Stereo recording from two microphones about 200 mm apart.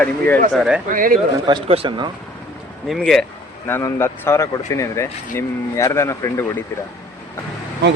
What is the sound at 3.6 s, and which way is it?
Speech, 10° left (ahead or behind).